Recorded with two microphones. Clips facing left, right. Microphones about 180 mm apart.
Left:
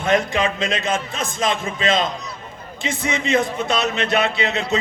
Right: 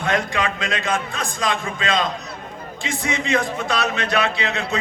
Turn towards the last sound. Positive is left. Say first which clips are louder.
# left 2 dB
turn(degrees=20)  # may be behind; listen again after turning